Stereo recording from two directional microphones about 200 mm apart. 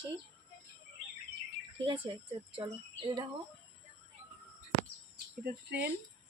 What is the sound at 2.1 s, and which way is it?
Speech, 25° right (ahead or behind).